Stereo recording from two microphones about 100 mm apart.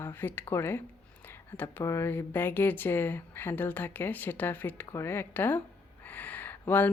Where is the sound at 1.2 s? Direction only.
20° left (ahead or behind).